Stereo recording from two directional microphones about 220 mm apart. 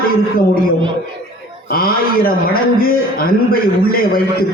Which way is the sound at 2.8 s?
40° left (ahead or behind).